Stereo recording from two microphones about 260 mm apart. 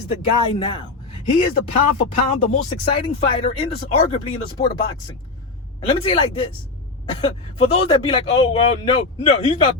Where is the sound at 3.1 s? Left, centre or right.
Left.